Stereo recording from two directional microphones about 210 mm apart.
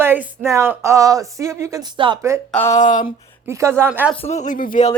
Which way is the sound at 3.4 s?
15° right (ahead or behind).